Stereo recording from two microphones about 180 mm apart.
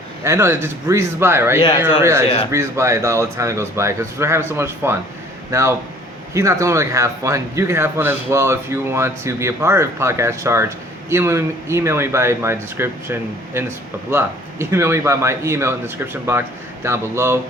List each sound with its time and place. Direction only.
0.3 s speech: 15° right (ahead or behind)